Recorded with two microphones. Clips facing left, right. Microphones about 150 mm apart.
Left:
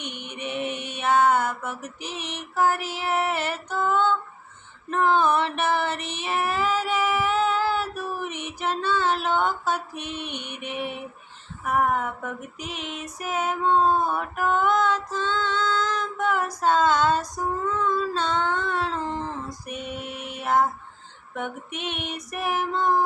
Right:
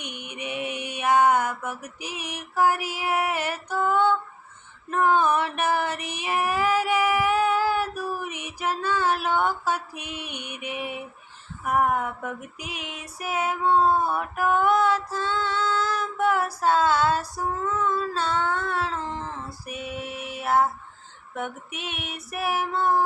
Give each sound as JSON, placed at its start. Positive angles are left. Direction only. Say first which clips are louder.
{"t": 0.0, "sound": "mantra", "louder": "left 1 dB", "side_deg": -10}
{"t": 4.9, "sound": "female singing", "louder": "even", "side_deg": -10}